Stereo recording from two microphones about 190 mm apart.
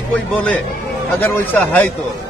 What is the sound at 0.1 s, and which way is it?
Speech, 5° left (ahead or behind).